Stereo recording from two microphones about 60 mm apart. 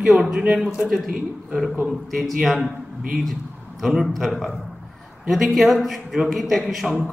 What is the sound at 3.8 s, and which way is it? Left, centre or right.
Speech, centre.